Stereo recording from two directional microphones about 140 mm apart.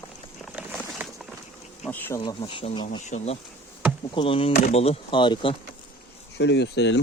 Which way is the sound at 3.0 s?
50° left (ahead or behind).